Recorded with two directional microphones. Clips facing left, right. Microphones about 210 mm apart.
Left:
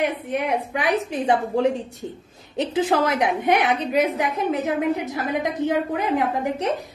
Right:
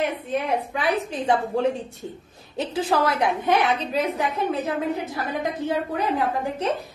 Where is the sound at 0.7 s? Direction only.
20° left (ahead or behind).